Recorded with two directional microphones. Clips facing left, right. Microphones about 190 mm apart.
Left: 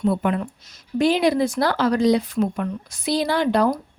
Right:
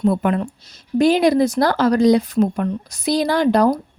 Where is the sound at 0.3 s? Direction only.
35° right (ahead or behind).